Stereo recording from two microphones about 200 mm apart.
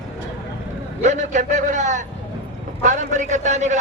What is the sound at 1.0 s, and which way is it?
A man's voice, 35° right (ahead or behind).